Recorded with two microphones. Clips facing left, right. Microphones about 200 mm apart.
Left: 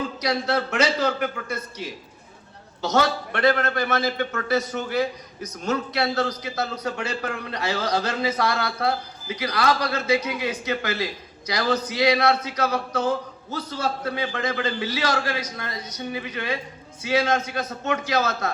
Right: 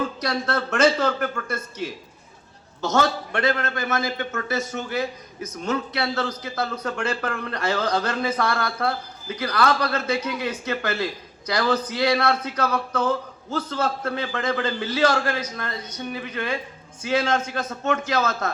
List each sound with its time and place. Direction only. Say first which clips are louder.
0.2 s a man's voice: left 1 dB; 50° right (ahead or behind)
2.8 s a man's voice: even; 50° right (ahead or behind)
3.4 s a man's voice: left 4 dB; 50° left (ahead or behind)
3.8 s a man's voice: left 2 dB; 50° right (ahead or behind)